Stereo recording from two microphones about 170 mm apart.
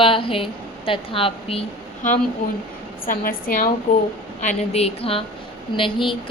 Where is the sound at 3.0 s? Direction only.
55° left (ahead or behind).